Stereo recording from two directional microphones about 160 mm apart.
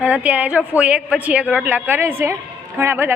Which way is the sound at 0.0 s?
10° right (ahead or behind).